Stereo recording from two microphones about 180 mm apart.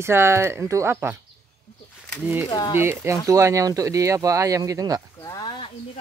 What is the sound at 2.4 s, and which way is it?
Speech, 20° left (ahead or behind).